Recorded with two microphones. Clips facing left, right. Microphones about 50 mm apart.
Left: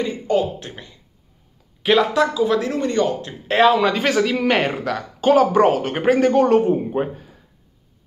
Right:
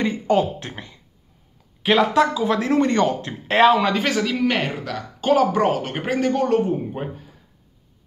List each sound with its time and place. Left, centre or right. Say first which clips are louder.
0.6 s a man's voice: right 1 dB; right
1.8 s speech: even; centre
2.3 s speech: left 1 dB; right
2.8 s a man's voice: right 1 dB; right
3.4 s speech: even; centre
4.0 s a man's voice: left 3 dB; left
5.2 s a man's voice: left 3 dB; centre